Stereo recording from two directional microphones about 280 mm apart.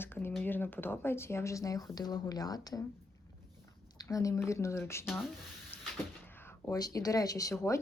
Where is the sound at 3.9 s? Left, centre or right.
Centre.